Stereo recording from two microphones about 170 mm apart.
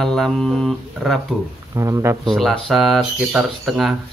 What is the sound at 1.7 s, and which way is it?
Speech, 20° right (ahead or behind).